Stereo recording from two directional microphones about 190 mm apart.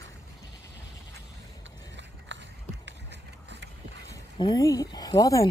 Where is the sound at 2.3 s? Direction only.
75° right (ahead or behind).